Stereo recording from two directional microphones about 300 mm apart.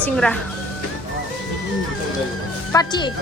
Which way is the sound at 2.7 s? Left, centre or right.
Centre.